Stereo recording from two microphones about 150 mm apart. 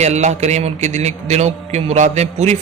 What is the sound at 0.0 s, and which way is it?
Speech, 50° right (ahead or behind).